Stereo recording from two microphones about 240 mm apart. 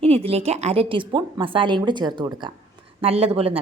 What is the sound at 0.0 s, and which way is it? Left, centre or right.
A woman's voice, right.